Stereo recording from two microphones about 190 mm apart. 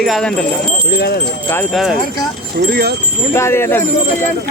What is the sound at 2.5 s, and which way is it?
Speech, 55° right (ahead or behind).